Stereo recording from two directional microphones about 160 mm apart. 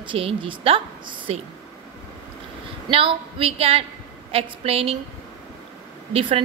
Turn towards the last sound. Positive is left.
turn(degrees=-35)  # may be behind; listen again after turning